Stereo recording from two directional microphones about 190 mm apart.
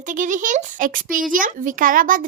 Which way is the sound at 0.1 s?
40° right (ahead or behind).